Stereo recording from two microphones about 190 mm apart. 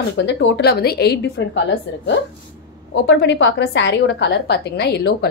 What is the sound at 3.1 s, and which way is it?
A woman's voice, 65° left (ahead or behind).